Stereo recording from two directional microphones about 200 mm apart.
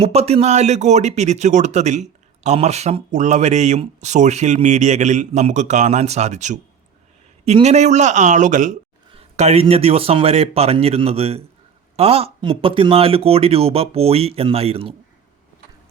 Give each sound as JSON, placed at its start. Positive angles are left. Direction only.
{"t": 0.0, "sound": "speech", "side_deg": -30}